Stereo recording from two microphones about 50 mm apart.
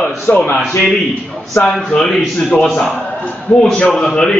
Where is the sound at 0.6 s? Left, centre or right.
Centre.